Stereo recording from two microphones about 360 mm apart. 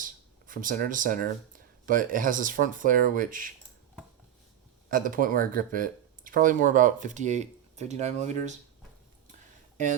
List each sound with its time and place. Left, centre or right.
0.0 s a sound: right
1.9 s speech: right
4.9 s speech: right